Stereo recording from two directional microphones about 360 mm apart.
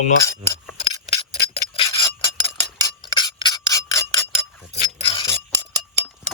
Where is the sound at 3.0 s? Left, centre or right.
Centre.